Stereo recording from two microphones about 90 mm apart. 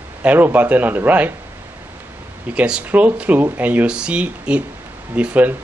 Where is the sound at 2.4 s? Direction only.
10° right (ahead or behind).